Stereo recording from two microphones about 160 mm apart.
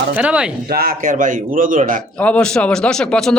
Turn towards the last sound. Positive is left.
turn(degrees=5)  # may be behind; listen again after turning